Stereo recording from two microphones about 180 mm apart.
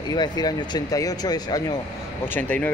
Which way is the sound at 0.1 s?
25° left (ahead or behind).